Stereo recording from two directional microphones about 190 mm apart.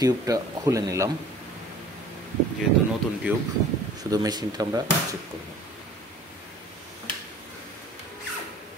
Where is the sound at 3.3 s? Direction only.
10° right (ahead or behind).